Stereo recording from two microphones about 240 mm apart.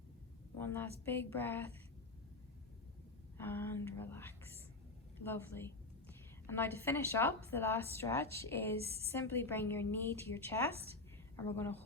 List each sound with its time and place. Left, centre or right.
0.5 s a woman's voice: centre
3.3 s a woman's voice: centre
8.8 s a woman's voice: right
9.0 s a woman's voice: centre